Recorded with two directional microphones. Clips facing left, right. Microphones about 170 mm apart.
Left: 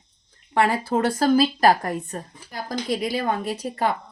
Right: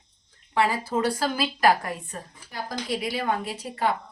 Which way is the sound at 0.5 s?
55° left (ahead or behind).